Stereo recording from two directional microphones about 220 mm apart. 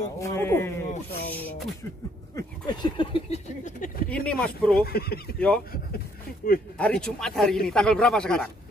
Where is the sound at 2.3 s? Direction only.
20° left (ahead or behind).